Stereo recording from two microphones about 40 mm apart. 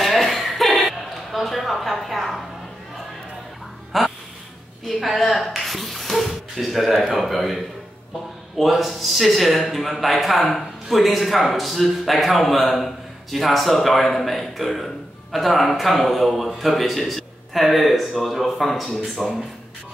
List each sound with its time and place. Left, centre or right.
0.0 s chuckle: centre
1.3 s a sound: centre
3.9 s duck: centre
4.8 s speech: centre